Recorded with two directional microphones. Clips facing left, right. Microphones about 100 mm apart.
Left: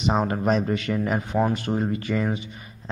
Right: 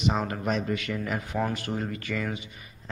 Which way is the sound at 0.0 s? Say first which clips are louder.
Left 5 dB; 35° left (ahead or behind).